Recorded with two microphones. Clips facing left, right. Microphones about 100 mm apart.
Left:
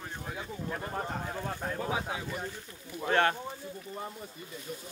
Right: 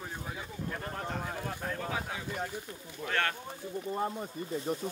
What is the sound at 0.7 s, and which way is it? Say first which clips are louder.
Speech: left 2 dB; 10° left (ahead or behind).